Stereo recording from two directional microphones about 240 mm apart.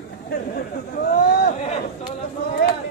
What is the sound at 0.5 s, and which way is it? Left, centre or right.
Chatter, left.